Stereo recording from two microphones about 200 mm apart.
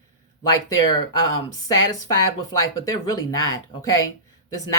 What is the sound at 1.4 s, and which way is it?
Speech, 20° left (ahead or behind).